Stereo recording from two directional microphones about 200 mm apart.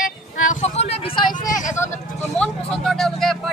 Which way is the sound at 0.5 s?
35° left (ahead or behind).